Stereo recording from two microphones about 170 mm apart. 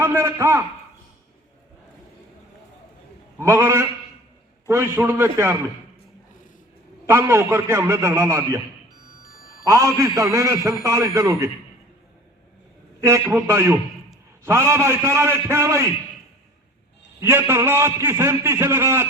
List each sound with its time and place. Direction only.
0.0 s a man's voice: 15° right (ahead or behind)
3.4 s a man's voice: 15° right (ahead or behind)
7.1 s a man's voice: 15° right (ahead or behind)
9.2 s a sound: 60° left (ahead or behind)
9.6 s a man's voice: 15° right (ahead or behind)
13.0 s a man's voice: 15° right (ahead or behind)
17.2 s a man's voice: 15° right (ahead or behind)